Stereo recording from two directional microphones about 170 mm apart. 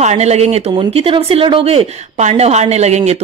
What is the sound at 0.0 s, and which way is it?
A woman's voice, 40° right (ahead or behind).